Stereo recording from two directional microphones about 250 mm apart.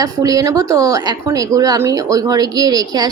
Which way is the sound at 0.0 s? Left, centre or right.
Centre.